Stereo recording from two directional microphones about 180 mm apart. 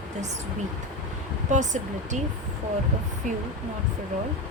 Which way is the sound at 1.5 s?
40° right (ahead or behind).